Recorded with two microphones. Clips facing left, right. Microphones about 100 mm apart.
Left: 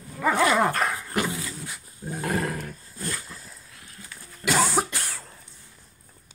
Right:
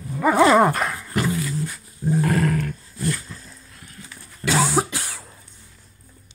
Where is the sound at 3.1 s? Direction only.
5° left (ahead or behind).